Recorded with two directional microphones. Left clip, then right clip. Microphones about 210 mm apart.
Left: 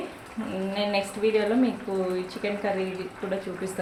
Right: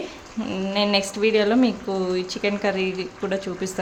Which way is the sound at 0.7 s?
35° right (ahead or behind).